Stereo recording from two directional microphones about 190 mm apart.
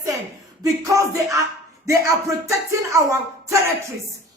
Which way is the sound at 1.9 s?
15° right (ahead or behind).